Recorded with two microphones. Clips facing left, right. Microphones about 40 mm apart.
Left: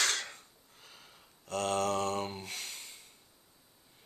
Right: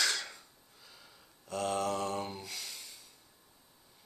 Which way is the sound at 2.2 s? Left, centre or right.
Left.